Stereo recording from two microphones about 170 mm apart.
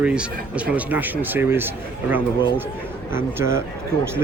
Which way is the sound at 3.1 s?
15° right (ahead or behind).